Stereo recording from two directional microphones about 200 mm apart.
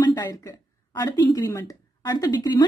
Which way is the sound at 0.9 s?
20° left (ahead or behind).